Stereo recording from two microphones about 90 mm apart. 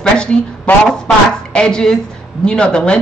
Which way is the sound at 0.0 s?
10° left (ahead or behind).